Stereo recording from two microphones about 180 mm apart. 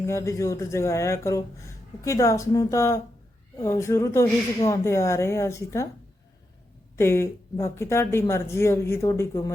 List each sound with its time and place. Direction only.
0.0 s speech: 15° left (ahead or behind)
6.9 s speech: 15° left (ahead or behind)